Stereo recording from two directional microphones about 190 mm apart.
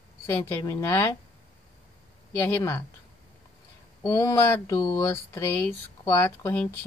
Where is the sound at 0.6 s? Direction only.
15° left (ahead or behind).